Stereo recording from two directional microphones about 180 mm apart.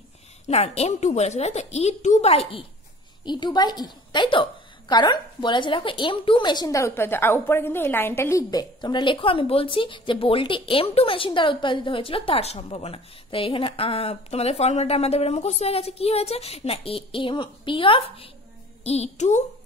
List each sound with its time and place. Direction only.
0.5 s a woman's voice: 35° left (ahead or behind)